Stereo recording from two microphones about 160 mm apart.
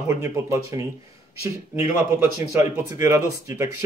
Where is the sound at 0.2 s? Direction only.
20° right (ahead or behind).